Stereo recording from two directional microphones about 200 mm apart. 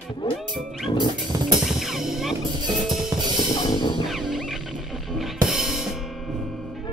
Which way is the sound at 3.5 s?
20° left (ahead or behind).